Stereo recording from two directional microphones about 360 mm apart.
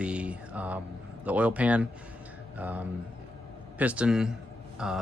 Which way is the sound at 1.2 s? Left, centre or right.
Centre.